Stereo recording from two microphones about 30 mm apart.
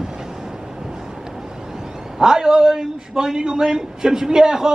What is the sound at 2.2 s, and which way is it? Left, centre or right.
A man's voice, right.